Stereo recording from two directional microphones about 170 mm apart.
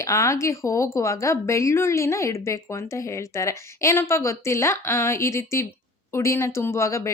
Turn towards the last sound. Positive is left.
turn(degrees=20)  # may be behind; listen again after turning